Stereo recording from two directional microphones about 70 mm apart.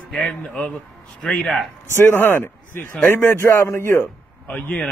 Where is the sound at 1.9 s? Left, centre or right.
Left.